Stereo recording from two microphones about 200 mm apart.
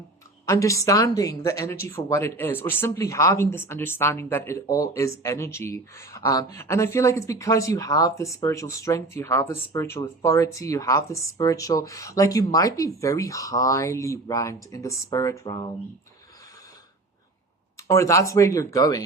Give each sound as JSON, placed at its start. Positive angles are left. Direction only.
{"t": 0.4, "sound": "speech", "side_deg": 15}
{"t": 17.8, "sound": "speech", "side_deg": 15}